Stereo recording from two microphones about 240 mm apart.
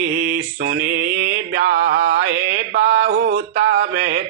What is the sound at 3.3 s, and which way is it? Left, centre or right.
Speech, right.